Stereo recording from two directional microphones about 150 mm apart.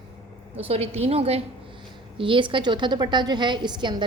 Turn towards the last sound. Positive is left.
turn(degrees=-30)  # may be behind; listen again after turning